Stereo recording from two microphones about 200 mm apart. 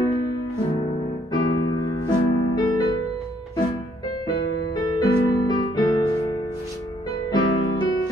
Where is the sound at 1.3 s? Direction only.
20° left (ahead or behind).